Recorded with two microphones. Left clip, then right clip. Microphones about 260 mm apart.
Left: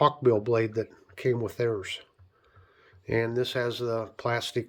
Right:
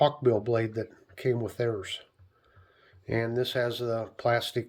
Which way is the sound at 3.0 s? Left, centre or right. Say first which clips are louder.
Left 2 dB; centre.